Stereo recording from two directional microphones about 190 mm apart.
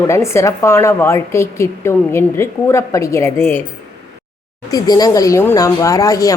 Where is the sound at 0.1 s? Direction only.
15° left (ahead or behind).